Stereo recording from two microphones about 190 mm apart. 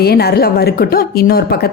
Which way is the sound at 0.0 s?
55° left (ahead or behind).